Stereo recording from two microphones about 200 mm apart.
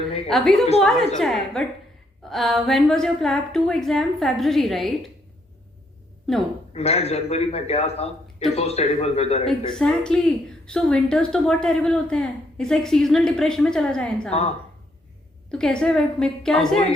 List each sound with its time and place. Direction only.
0.3 s a woman's voice: centre (ahead or behind)
6.3 s a woman's voice: centre (ahead or behind)
6.7 s a man's voice: 30° left (ahead or behind)
9.7 s a woman's voice: 5° left (ahead or behind)
14.3 s a man's voice: 30° left (ahead or behind)
15.4 s a woman's voice: 5° left (ahead or behind)